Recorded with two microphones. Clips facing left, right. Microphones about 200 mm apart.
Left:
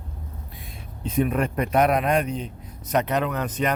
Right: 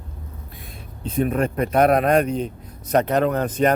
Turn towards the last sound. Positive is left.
turn(degrees=-35)  # may be behind; listen again after turning